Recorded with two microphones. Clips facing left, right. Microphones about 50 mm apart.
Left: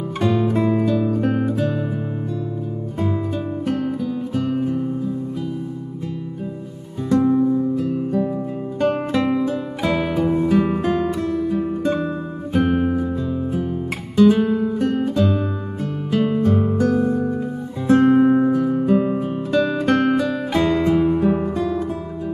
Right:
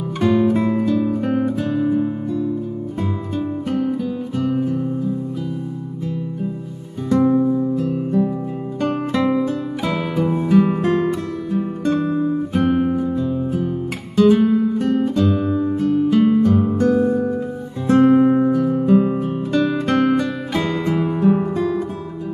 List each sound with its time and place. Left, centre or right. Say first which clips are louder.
0.2 s music: right 3 dB; centre
3.6 s music: even; centre
4.4 s guitar: right 2 dB; centre
7.1 s music: right 1 dB; centre
12.5 s music: left 1 dB; centre